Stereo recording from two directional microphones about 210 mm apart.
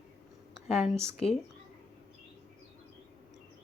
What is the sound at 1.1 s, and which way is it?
Speech, 30° left (ahead or behind).